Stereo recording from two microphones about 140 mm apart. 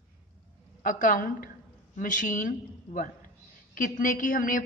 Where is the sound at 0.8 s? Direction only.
75° left (ahead or behind).